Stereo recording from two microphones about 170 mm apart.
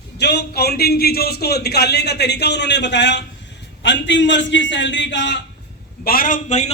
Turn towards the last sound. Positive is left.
turn(degrees=45)  # may be behind; listen again after turning